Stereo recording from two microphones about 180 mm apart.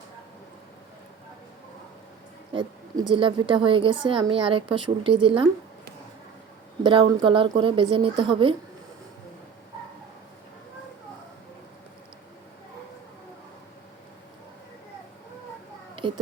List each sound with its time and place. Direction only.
2.5 s speech: 25° right (ahead or behind)
6.8 s speech: 30° right (ahead or behind)
16.0 s a sound: 25° right (ahead or behind)